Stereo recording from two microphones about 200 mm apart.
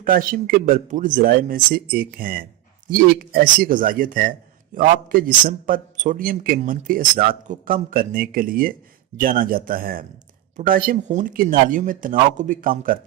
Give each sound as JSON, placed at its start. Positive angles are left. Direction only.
{"t": 0.0, "sound": "speech", "side_deg": -45}